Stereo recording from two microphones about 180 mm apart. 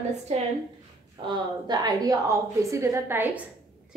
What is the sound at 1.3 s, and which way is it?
A woman's voice, 25° right (ahead or behind).